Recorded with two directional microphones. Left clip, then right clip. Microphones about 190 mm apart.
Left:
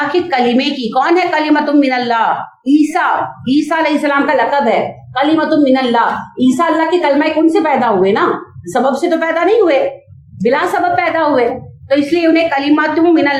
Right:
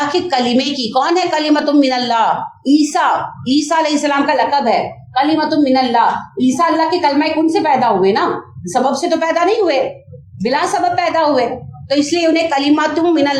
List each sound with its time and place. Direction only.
0.1 s a woman's voice: 45° right (ahead or behind)